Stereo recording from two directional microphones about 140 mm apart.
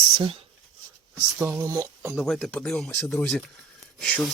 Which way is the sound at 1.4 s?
20° right (ahead or behind).